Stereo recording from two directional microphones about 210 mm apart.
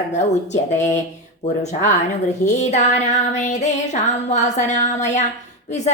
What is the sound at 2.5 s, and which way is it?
A woman's voice, 35° left (ahead or behind).